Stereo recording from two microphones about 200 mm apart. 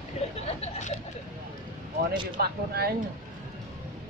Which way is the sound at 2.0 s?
50° right (ahead or behind).